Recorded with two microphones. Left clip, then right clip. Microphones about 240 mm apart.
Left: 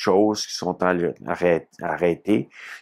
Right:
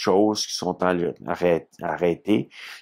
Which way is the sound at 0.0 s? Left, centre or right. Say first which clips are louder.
Left 1 dB; right.